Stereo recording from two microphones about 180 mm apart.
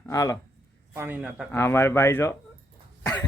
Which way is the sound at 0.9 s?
10° right (ahead or behind).